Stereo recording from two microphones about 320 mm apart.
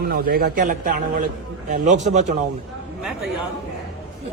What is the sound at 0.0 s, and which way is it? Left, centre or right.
A man's voice, right.